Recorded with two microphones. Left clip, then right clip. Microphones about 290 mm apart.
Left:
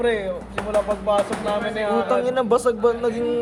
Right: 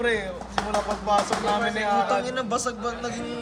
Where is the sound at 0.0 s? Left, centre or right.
Centre.